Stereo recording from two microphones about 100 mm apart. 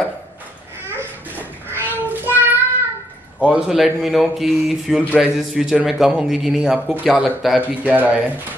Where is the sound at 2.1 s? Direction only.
20° right (ahead or behind).